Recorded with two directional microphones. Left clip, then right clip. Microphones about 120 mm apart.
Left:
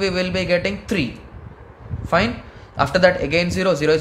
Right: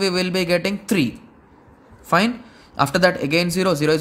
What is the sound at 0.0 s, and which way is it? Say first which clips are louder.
Speech: even; 55° right (ahead or behind).